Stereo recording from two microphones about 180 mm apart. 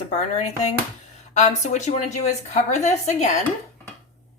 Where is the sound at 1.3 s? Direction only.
40° left (ahead or behind).